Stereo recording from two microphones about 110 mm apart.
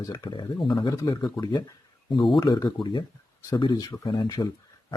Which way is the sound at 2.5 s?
45° left (ahead or behind).